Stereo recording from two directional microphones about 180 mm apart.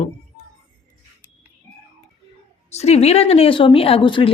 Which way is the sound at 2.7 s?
35° left (ahead or behind).